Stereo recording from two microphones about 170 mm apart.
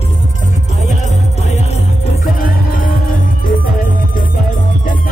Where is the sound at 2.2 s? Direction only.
55° left (ahead or behind).